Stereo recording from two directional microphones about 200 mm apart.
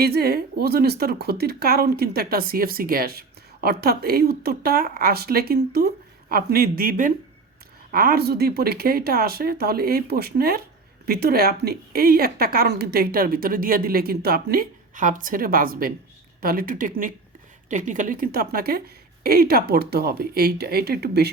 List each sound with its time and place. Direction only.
0.0 s speech: 50° right (ahead or behind)